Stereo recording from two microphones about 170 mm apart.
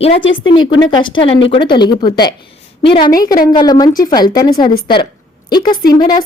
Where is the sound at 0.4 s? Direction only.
25° left (ahead or behind).